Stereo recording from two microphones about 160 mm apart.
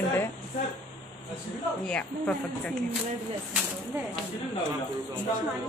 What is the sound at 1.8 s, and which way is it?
Speech, 5° left (ahead or behind).